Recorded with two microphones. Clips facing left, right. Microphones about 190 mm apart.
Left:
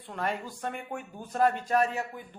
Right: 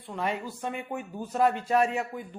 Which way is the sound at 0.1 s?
5° right (ahead or behind).